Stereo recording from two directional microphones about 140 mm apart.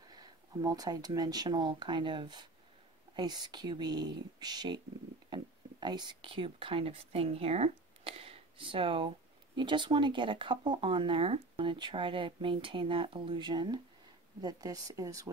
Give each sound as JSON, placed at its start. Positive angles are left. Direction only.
{"t": 0.1, "sound": "speech", "side_deg": -30}